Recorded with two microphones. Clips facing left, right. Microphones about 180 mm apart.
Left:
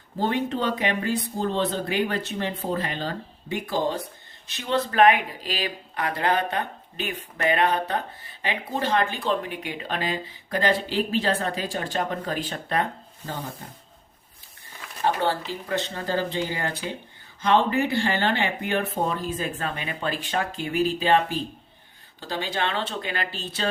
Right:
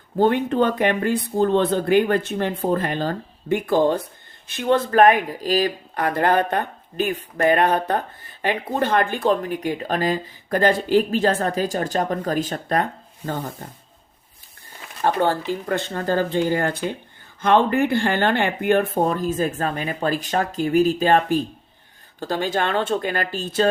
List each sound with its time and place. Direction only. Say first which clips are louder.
0.2 s speech: right 7 dB; 55° right (ahead or behind)
15.0 s speech: right 4 dB; 50° right (ahead or behind)